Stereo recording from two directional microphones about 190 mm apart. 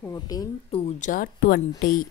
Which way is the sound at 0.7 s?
35° left (ahead or behind).